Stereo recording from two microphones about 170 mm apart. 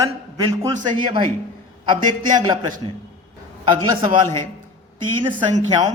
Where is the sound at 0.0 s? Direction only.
20° right (ahead or behind).